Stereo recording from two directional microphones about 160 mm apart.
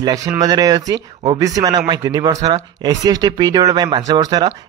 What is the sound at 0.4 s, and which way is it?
Speech, 25° right (ahead or behind).